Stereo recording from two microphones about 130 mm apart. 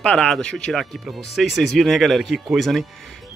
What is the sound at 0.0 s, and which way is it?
Speech, 5° left (ahead or behind).